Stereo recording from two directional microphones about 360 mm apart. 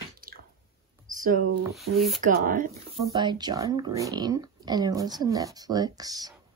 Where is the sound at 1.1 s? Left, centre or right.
Right.